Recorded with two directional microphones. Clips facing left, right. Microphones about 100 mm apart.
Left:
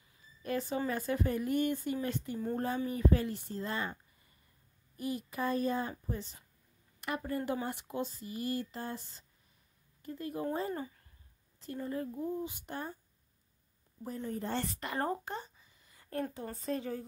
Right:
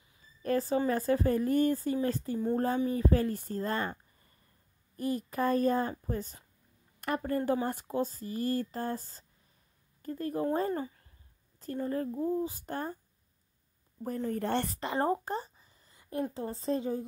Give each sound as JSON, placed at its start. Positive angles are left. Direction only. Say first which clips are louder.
{"t": 0.4, "sound": "a woman's voice", "louder": "right 6 dB", "side_deg": -40}
{"t": 2.3, "sound": "a woman's voice", "louder": "right 5 dB", "side_deg": -25}
{"t": 4.9, "sound": "a woman's voice", "louder": "right 5 dB", "side_deg": -45}
{"t": 14.0, "sound": "a woman's voice", "louder": "right 5 dB", "side_deg": -45}
{"t": 14.4, "sound": "a woman's voice", "louder": "right 5 dB", "side_deg": -65}
{"t": 14.7, "sound": "speech", "louder": "right 5 dB", "side_deg": -25}
{"t": 15.2, "sound": "a sound", "louder": "right 6 dB", "side_deg": -40}
{"t": 16.0, "sound": "a sound", "louder": "right 3 dB", "side_deg": -15}
{"t": 16.3, "sound": "speech", "louder": "right 5 dB", "side_deg": -25}